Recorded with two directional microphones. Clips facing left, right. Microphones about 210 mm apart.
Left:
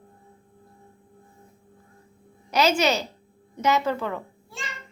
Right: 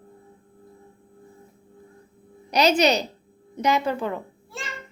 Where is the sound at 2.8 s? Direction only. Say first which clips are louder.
Right 3 dB; 20° right (ahead or behind).